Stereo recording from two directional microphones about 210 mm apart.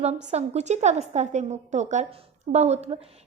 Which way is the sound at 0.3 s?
30° right (ahead or behind).